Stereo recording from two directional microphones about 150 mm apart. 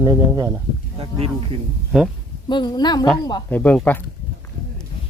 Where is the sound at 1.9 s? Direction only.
5° right (ahead or behind).